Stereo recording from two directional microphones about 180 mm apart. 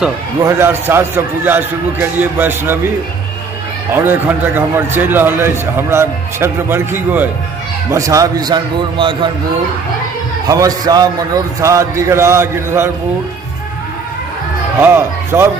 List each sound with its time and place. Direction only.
0.4 s a man's voice: 15° right (ahead or behind)
3.9 s a man's voice: 10° right (ahead or behind); by 9.3 s 25° right (ahead or behind)
10.4 s a man's voice: 20° right (ahead or behind)
14.8 s a man's voice: 15° right (ahead or behind)